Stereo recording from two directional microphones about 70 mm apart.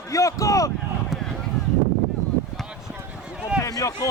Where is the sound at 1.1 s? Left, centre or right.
Centre.